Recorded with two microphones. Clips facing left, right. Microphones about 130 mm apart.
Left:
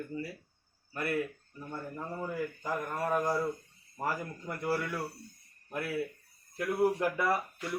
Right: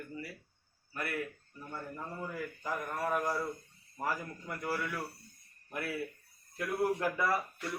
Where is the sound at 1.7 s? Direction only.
20° left (ahead or behind).